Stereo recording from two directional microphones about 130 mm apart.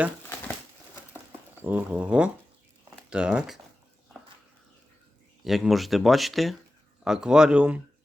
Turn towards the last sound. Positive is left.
turn(degrees=-10)  # may be behind; listen again after turning